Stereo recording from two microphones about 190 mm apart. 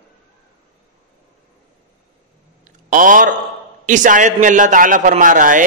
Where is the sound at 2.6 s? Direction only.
45° right (ahead or behind).